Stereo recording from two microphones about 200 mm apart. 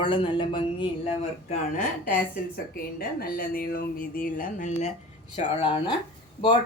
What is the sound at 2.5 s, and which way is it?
Speech, 50° left (ahead or behind).